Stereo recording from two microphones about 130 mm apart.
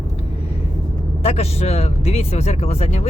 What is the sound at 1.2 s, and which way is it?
Speech, 50° left (ahead or behind).